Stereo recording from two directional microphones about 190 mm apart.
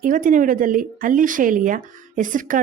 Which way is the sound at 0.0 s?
45° right (ahead or behind).